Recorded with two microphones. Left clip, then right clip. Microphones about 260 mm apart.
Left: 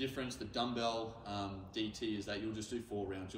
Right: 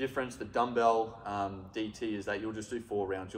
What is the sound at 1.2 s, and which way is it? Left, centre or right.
Speech, right.